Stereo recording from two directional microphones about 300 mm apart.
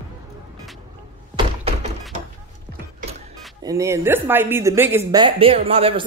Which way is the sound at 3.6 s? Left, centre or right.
Centre.